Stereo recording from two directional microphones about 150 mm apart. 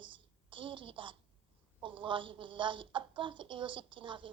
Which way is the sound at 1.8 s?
35° right (ahead or behind).